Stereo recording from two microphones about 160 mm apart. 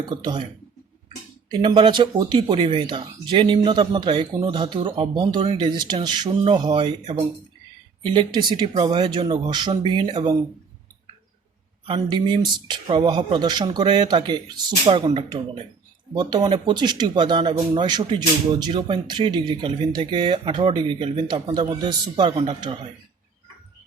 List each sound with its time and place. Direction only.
0.1 s speech: 25° right (ahead or behind)
1.5 s speech: 30° right (ahead or behind)
11.9 s speech: 30° right (ahead or behind)